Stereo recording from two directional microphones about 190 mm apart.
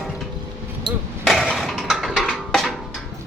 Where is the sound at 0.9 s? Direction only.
25° right (ahead or behind).